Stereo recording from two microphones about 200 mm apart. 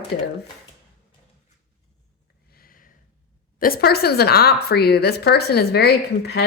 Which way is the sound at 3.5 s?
45° left (ahead or behind).